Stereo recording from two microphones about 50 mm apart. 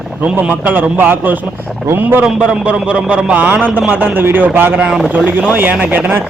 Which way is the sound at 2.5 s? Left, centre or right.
Right.